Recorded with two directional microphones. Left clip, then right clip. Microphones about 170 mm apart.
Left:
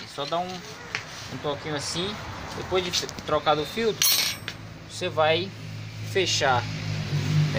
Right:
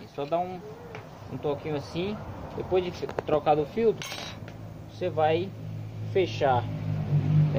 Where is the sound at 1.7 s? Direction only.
25° right (ahead or behind).